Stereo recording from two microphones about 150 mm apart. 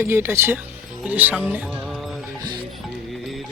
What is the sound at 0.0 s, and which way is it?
Speech, 15° right (ahead or behind).